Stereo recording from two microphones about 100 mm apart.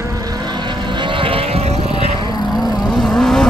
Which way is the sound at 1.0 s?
60° right (ahead or behind).